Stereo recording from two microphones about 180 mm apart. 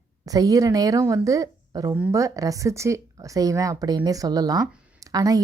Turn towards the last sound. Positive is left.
turn(degrees=-20)  # may be behind; listen again after turning